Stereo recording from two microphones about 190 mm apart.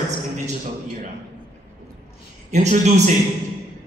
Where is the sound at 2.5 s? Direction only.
35° right (ahead or behind).